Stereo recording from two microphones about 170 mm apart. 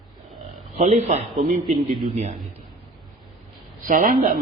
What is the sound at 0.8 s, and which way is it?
Speech, 40° right (ahead or behind).